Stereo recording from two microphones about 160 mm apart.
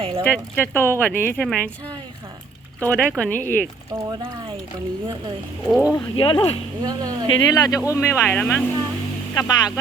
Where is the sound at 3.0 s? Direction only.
5° left (ahead or behind).